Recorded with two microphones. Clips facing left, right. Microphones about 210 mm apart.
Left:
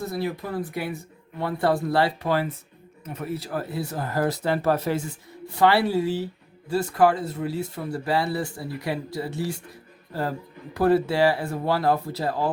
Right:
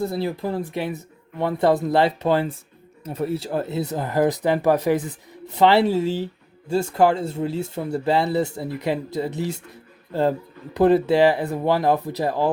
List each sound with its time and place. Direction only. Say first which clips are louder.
0.0 s speech: right 4 dB; 30° right (ahead or behind)